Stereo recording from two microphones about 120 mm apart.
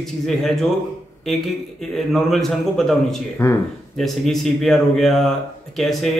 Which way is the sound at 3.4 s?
25° left (ahead or behind).